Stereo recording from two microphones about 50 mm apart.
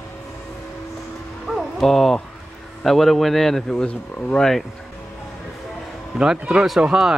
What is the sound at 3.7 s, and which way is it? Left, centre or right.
Speech, centre.